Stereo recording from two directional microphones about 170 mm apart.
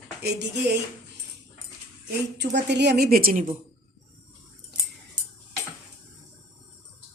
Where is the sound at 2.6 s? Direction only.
85° right; by 3.4 s 60° right (ahead or behind).